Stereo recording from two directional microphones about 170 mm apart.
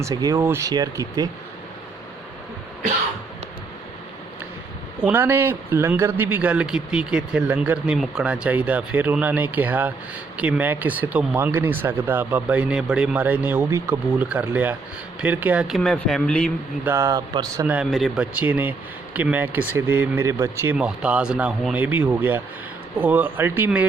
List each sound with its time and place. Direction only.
0.0 s speech: 20° right (ahead or behind)
5.0 s a man's voice: 10° right (ahead or behind); by 16.5 s 5° left (ahead or behind)
16.8 s a man's voice: 15° right (ahead or behind)
17.7 s a man's voice: 5° right (ahead or behind)